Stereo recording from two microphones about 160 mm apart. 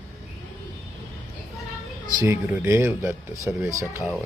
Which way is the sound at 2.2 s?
15° right (ahead or behind).